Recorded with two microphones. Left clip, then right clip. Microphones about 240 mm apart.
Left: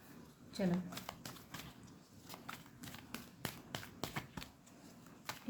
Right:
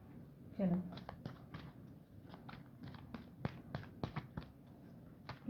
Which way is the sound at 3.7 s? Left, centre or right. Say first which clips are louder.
Left 3 dB; left.